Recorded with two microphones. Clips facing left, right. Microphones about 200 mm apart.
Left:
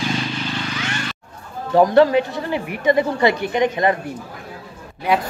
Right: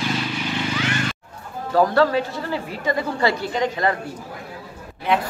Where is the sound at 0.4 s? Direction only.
15° right (ahead or behind).